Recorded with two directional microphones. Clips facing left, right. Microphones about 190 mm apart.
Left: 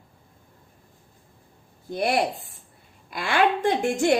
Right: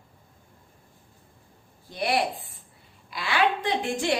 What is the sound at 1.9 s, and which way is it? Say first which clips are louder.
A woman's voice: left 3 dB; 45° left (ahead or behind).